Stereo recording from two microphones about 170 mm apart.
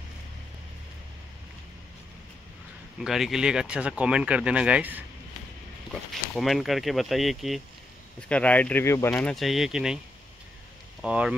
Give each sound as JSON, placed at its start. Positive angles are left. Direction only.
{"t": 3.0, "sound": "speech", "side_deg": 0}
{"t": 6.3, "sound": "speech", "side_deg": 0}
{"t": 9.3, "sound": "speech", "side_deg": 0}
{"t": 11.0, "sound": "speech", "side_deg": -5}